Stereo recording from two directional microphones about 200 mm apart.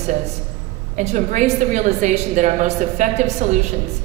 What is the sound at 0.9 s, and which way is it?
A woman's voice, 40° right (ahead or behind).